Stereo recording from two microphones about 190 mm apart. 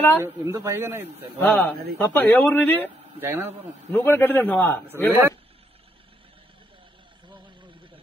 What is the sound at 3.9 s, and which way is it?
Speech, 10° left (ahead or behind).